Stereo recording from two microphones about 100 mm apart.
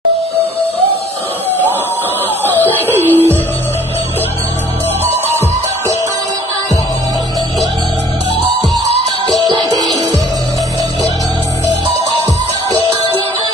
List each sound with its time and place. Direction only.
2.6 s a sound: 20° left (ahead or behind)
3.1 s music: 20° left (ahead or behind)
9.5 s music: 40° right (ahead or behind)